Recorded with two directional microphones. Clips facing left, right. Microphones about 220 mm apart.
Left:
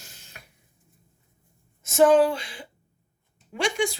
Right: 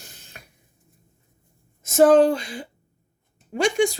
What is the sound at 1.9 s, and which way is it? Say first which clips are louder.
Speech: right 3 dB; 40° right (ahead or behind).